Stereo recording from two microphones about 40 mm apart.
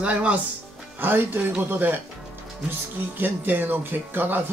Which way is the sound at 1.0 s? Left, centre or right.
Right.